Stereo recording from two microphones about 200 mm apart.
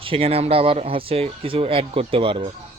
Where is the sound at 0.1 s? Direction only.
30° right (ahead or behind).